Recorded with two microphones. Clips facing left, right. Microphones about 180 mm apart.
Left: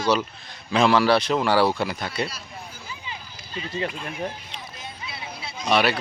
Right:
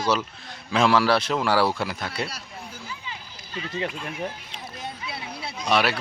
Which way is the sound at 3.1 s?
20° left (ahead or behind).